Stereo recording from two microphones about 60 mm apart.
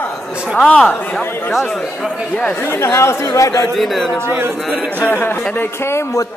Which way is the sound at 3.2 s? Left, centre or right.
Left.